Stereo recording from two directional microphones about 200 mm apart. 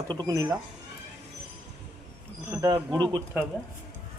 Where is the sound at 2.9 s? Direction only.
20° right (ahead or behind).